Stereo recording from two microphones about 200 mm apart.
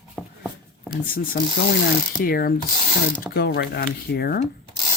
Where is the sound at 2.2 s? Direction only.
45° left (ahead or behind).